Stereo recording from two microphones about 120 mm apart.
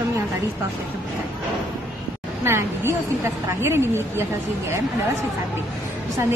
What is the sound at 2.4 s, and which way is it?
A woman's voice, 20° right (ahead or behind).